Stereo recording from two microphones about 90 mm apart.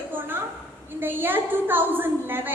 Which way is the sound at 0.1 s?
25° right (ahead or behind).